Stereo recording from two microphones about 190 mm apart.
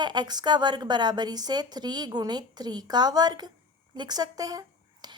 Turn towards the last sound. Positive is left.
turn(degrees=-20)  # may be behind; listen again after turning